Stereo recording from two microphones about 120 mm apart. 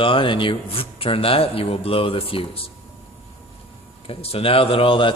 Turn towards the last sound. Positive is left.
turn(degrees=45)  # may be behind; listen again after turning